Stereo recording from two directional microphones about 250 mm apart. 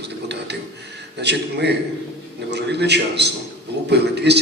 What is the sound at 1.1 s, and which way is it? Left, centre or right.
A man's voice, right.